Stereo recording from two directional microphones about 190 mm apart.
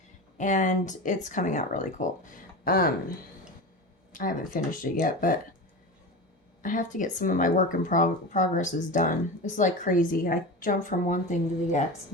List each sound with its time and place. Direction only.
0.3 s speech: 40° left (ahead or behind)
4.1 s speech: 50° left (ahead or behind)
6.6 s speech: 45° left (ahead or behind)